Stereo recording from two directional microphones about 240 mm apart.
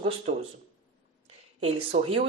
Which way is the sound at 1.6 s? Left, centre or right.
Right.